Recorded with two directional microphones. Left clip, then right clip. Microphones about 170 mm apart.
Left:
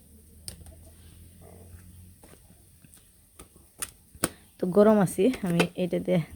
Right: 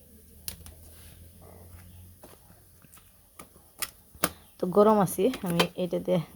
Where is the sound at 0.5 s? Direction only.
25° right (ahead or behind).